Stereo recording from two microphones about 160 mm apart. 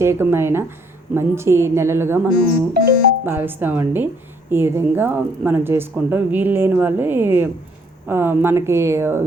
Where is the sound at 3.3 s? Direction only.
15° right (ahead or behind).